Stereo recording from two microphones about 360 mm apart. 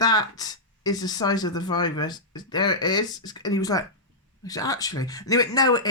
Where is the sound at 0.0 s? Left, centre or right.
Centre.